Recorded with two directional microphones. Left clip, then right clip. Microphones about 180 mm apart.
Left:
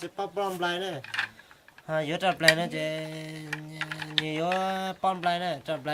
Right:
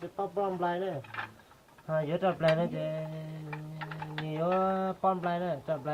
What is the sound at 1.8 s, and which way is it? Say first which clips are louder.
Speech: left 3 dB; 20° left (ahead or behind).